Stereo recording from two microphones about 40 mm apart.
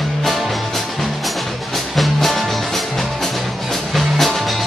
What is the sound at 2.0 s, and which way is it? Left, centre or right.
Music, centre.